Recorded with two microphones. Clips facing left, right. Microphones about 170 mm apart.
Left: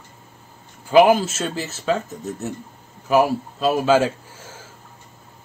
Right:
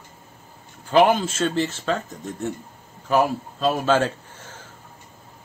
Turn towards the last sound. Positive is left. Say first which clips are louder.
# left 1 dB
turn(degrees=10)  # may be behind; listen again after turning